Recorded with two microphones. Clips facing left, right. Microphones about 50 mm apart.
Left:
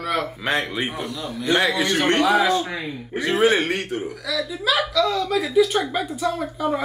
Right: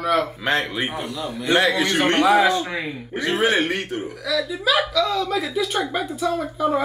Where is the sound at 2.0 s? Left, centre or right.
Centre.